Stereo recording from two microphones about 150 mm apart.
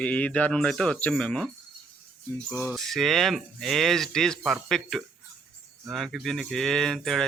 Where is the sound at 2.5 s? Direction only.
20° left (ahead or behind).